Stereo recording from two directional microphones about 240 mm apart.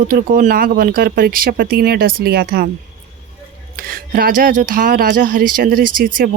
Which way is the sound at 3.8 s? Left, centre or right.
Right.